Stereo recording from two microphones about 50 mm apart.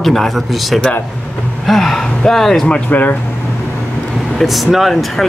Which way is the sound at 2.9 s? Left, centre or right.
Left.